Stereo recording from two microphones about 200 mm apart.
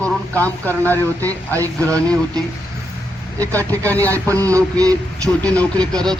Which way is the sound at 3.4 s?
10° left (ahead or behind).